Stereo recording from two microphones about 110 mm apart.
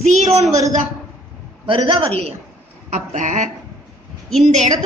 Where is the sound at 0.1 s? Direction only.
90° right.